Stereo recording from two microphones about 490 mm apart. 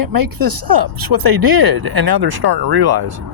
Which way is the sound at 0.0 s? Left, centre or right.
Right.